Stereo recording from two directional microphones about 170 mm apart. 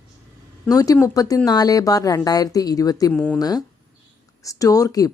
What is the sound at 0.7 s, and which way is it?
Speech, 20° left (ahead or behind).